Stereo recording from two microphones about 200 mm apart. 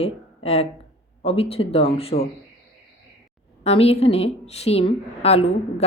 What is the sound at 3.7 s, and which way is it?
A woman's voice, 30° left (ahead or behind).